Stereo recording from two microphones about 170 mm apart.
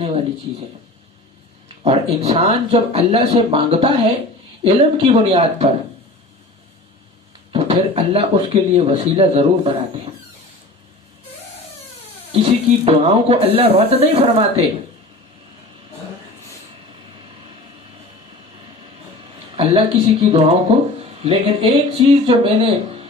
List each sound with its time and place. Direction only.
0.0 s speech: 35° right (ahead or behind)
2.2 s speech: 35° right (ahead or behind)
7.5 s speech: 35° right (ahead or behind)
12.3 s speech: 35° right (ahead or behind)
19.5 s speech: 35° right (ahead or behind)